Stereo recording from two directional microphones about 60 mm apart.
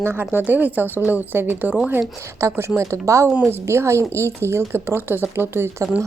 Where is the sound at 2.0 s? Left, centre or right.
Right.